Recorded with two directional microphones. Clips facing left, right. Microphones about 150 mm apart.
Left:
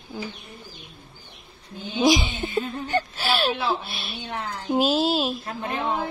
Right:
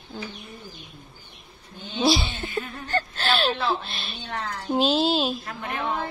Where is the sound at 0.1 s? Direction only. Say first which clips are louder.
Left 2 dB; 10° left (ahead or behind).